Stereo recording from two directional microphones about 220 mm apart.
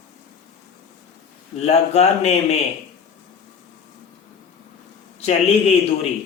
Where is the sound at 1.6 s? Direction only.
30° left (ahead or behind).